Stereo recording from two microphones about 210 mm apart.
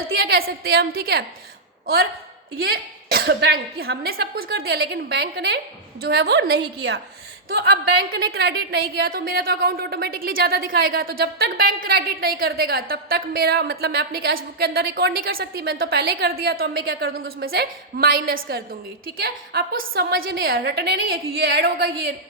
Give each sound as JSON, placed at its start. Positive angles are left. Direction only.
{"t": 0.6, "sound": "a woman's voice", "side_deg": -45}
{"t": 2.6, "sound": "a woman's voice", "side_deg": -50}
{"t": 8.1, "sound": "a woman's voice", "side_deg": -45}